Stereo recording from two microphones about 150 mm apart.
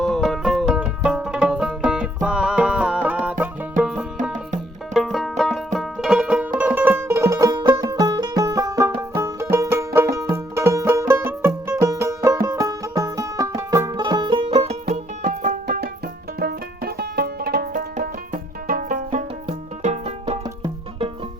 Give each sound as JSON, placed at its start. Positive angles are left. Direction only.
{"t": 0.0, "sound": "music", "side_deg": 0}
{"t": 4.2, "sound": "music", "side_deg": -55}
{"t": 4.9, "sound": "music", "side_deg": 0}
{"t": 16.4, "sound": "music", "side_deg": -90}
{"t": 18.7, "sound": "music", "side_deg": -65}
{"t": 19.8, "sound": "music", "side_deg": -45}